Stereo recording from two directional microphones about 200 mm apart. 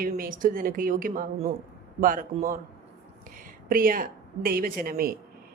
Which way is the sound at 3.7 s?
45° right (ahead or behind).